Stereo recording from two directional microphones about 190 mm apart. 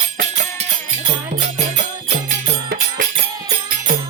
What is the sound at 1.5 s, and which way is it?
Music, 40° right (ahead or behind).